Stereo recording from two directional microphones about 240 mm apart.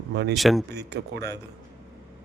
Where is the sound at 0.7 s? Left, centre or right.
Right.